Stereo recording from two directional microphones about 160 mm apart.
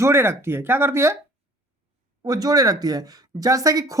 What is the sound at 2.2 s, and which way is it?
Speech, 25° right (ahead or behind).